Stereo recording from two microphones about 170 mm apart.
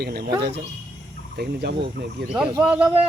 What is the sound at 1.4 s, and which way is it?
Speech, 70° right (ahead or behind).